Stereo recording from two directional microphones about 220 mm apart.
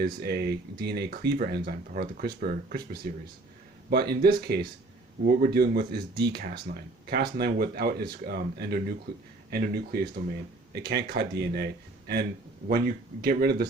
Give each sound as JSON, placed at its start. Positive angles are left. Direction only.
{"t": 0.0, "sound": "speech", "side_deg": -45}